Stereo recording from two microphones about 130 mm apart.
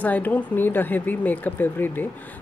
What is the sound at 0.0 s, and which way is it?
A woman's voice, 10° left (ahead or behind).